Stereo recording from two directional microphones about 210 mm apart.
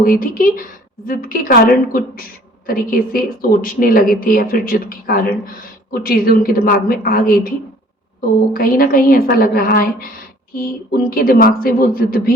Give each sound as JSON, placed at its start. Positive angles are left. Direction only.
{"t": 0.0, "sound": "a woman's voice", "side_deg": 40}